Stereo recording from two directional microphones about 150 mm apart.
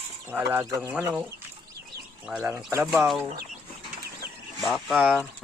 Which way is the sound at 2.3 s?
5° right (ahead or behind).